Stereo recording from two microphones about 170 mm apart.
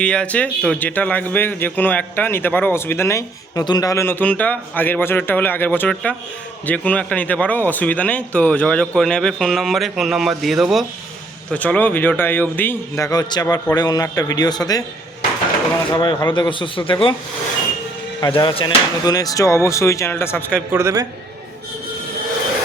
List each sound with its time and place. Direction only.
0.0 s a man's voice: 5° left (ahead or behind); by 14.8 s 20° left (ahead or behind)
15.9 s a man's voice: 25° left (ahead or behind)
18.2 s a man's voice: 25° left (ahead or behind)
20.7 s a man's voice: 20° right (ahead or behind)